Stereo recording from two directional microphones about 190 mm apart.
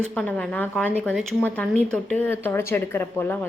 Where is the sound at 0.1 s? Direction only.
5° left (ahead or behind).